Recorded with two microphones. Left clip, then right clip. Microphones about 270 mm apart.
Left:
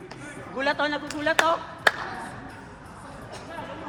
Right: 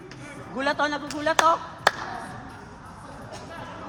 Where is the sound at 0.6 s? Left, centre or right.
Right.